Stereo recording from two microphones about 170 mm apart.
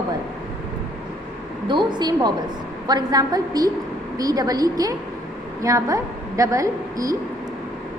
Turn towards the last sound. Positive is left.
turn(degrees=-20)  # may be behind; listen again after turning